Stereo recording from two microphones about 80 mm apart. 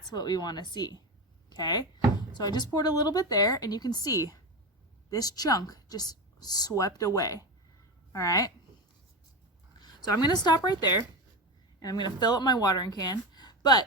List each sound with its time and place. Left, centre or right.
0.1 s speech: left
1.5 s a sound: left
2.7 s a woman's voice: left
9.7 s a woman's voice: left